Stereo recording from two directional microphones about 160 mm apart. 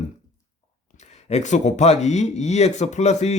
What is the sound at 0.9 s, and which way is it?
Speech, 45° left (ahead or behind).